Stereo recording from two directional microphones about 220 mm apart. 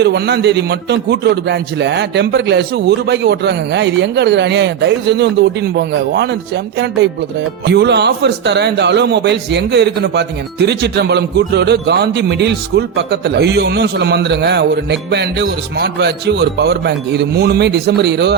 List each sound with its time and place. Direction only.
0.0 s a man's voice: 50° right (ahead or behind)